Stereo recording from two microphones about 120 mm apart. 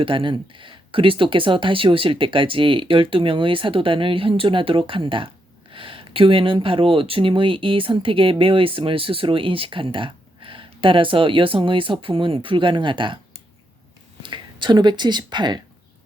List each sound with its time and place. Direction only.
0.0 s speech: 45° right (ahead or behind)
14.2 s speech: 40° right (ahead or behind)